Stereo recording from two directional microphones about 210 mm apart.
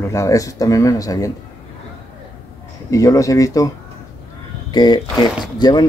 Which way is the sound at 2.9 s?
15° left (ahead or behind).